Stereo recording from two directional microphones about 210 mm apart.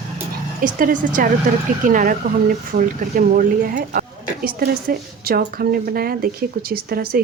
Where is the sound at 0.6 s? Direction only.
40° right (ahead or behind).